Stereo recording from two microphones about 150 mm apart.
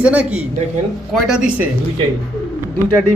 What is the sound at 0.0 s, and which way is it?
Speech, 10° right (ahead or behind).